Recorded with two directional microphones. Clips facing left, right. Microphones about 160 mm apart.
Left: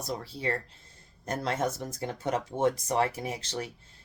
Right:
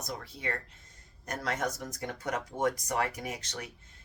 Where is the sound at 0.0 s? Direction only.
30° left (ahead or behind).